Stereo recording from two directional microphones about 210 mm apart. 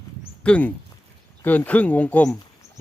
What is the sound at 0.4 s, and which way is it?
Speech, 5° left (ahead or behind).